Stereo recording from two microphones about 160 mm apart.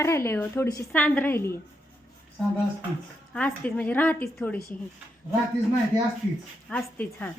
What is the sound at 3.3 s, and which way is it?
A woman's voice, 10° left (ahead or behind).